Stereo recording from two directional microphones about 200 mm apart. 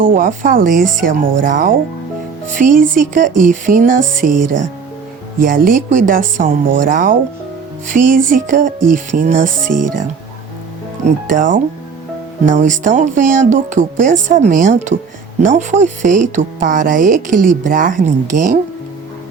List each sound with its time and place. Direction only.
0.0 s speech: 45° right (ahead or behind)
5.5 s speech: 45° right (ahead or behind)
11.0 s speech: 40° right (ahead or behind)